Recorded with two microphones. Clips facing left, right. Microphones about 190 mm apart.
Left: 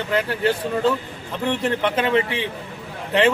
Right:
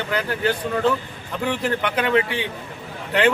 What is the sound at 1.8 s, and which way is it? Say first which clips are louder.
Speech: left 2 dB; 25° left (ahead or behind).